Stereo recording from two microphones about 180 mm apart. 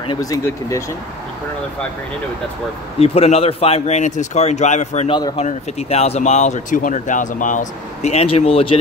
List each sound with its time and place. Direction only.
0.0 s speech: 25° left (ahead or behind)
3.0 s speech: 35° left (ahead or behind)
5.1 s speech: 30° left (ahead or behind)